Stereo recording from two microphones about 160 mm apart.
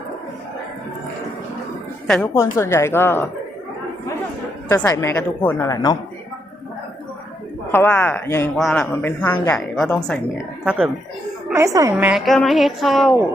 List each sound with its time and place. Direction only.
2.0 s a woman's voice: 5° left (ahead or behind)
2.3 s speech: 15° left (ahead or behind)
4.7 s a man's voice: 15° left (ahead or behind)
7.7 s a woman's voice: 10° left (ahead or behind)
9.6 s a woman's voice: centre (ahead or behind)
11.5 s a woman's voice: 20° right (ahead or behind)
12.2 s a woman's voice: centre (ahead or behind)